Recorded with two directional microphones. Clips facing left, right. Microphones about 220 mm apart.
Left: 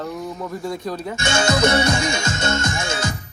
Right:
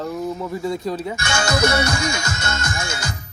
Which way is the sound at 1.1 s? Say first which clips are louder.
Left 5 dB; 25° left (ahead or behind).